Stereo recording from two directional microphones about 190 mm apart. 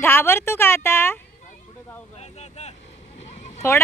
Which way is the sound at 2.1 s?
35° left (ahead or behind).